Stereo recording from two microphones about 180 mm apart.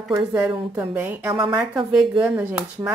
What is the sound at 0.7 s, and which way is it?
Speech, 10° right (ahead or behind).